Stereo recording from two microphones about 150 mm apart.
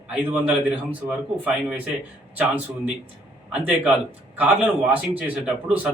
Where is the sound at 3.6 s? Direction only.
10° right (ahead or behind).